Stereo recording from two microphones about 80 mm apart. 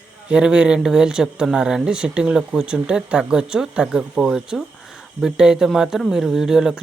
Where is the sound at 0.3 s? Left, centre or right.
Centre.